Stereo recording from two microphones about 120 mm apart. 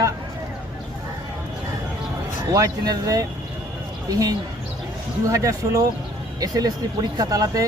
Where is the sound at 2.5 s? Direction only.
30° right (ahead or behind).